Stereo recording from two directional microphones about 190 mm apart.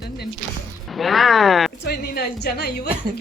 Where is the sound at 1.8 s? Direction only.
60° left (ahead or behind).